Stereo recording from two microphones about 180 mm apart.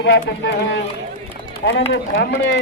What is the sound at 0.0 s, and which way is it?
Speech, 75° left (ahead or behind).